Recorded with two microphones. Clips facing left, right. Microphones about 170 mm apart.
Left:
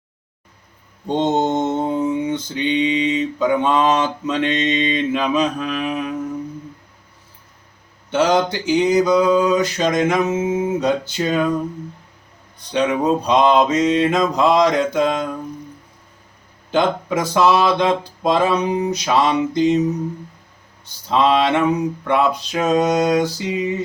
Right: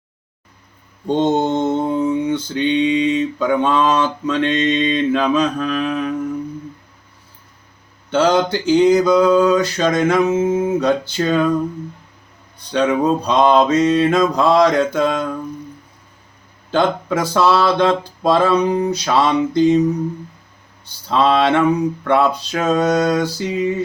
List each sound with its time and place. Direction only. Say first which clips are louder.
1.2 s mantra: right 1 dB; 15° left (ahead or behind)
8.1 s mantra: right 2 dB; 15° left (ahead or behind)
12.7 s mantra: right 2 dB; 15° left (ahead or behind)
16.7 s mantra: right 1 dB; 15° left (ahead or behind)
21.1 s mantra: right 1 dB; 15° left (ahead or behind)